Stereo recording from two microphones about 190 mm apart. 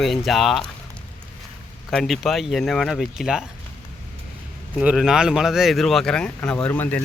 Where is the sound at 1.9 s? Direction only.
Centre (ahead or behind).